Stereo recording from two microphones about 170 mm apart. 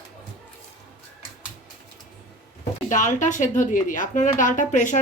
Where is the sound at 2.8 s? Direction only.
50° left (ahead or behind).